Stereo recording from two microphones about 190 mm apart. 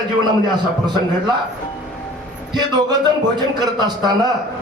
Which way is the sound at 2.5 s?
20° right (ahead or behind).